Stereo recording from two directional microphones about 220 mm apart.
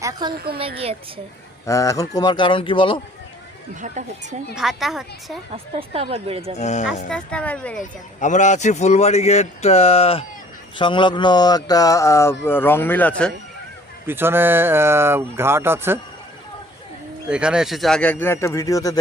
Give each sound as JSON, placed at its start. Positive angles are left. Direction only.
{"t": 0.0, "sound": "speech", "side_deg": -20}
{"t": 1.6, "sound": "speech", "side_deg": 15}
{"t": 3.8, "sound": "speech", "side_deg": -35}
{"t": 4.5, "sound": "speech", "side_deg": 0}
{"t": 5.9, "sound": "speech", "side_deg": -25}
{"t": 6.6, "sound": "speech", "side_deg": 30}
{"t": 7.1, "sound": "speech", "side_deg": 5}
{"t": 8.2, "sound": "speech", "side_deg": 35}
{"t": 14.1, "sound": "speech", "side_deg": -10}
{"t": 17.2, "sound": "speech", "side_deg": -5}